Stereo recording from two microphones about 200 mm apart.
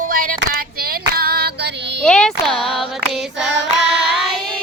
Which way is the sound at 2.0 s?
5° left (ahead or behind).